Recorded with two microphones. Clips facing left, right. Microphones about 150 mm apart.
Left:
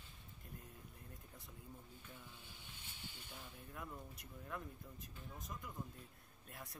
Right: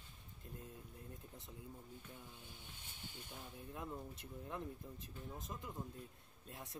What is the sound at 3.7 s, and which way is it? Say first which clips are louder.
Speech: right 4 dB; 20° right (ahead or behind).